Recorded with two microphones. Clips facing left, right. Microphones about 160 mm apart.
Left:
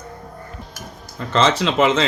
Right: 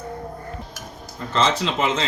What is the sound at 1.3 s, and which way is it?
Speech, 90° left.